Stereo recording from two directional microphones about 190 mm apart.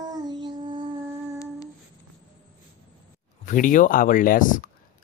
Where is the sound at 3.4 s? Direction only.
45° left (ahead or behind).